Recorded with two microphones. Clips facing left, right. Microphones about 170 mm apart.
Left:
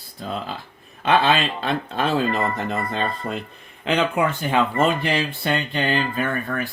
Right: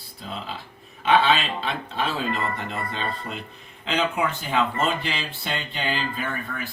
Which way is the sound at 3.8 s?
60° left (ahead or behind).